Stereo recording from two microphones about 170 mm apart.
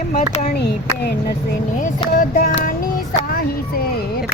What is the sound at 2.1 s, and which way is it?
Child singing, 55° left (ahead or behind).